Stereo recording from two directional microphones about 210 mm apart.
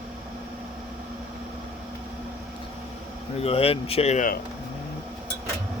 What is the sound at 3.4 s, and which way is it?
Speech, 30° left (ahead or behind).